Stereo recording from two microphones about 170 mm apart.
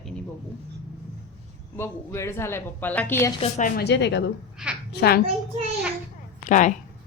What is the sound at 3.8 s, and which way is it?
Speech, 90° left.